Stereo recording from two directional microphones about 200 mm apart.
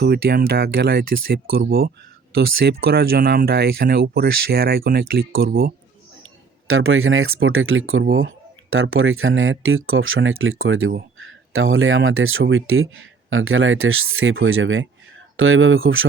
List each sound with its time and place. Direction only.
0.0 s speech: 55° right (ahead or behind)
6.2 s speech: 90° right